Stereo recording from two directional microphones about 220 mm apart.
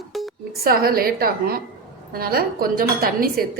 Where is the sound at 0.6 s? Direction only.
45° right (ahead or behind).